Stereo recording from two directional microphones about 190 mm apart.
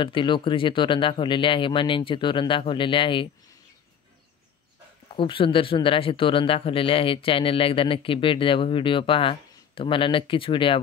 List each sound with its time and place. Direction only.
0.0 s speech: 25° left (ahead or behind)
5.1 s speech: 25° left (ahead or behind)